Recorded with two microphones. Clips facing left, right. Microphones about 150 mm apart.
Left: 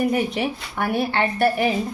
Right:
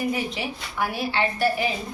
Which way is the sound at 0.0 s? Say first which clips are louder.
Left 6 dB; 55° left (ahead or behind).